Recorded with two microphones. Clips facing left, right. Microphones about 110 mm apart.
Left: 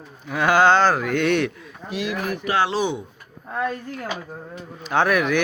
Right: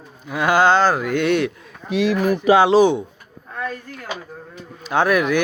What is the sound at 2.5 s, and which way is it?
Speech, 85° right.